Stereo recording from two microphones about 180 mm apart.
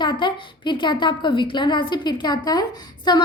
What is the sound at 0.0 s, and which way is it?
A woman's voice, 25° left (ahead or behind).